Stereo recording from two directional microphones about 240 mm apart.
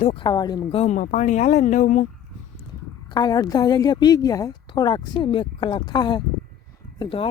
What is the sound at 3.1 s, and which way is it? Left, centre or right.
A woman's voice, centre.